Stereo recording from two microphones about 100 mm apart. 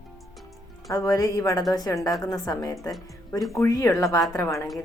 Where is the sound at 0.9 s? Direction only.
35° left (ahead or behind).